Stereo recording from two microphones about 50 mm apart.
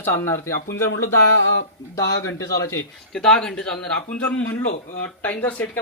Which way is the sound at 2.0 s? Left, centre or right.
Left.